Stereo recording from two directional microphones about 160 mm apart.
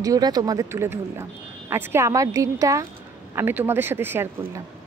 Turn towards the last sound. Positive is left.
turn(degrees=-15)  # may be behind; listen again after turning